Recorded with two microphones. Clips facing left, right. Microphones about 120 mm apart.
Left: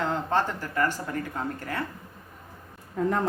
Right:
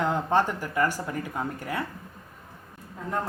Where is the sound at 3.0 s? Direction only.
80° left.